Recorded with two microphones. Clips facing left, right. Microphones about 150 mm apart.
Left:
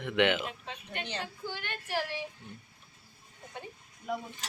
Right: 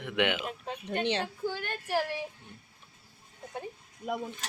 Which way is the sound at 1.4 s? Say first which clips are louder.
Right 5 dB; 40° right (ahead or behind).